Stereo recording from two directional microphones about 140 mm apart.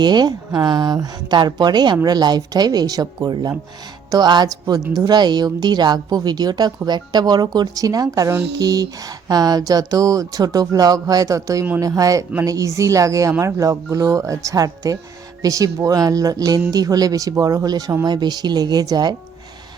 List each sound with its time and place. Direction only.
0.0 s speech: 30° right (ahead or behind)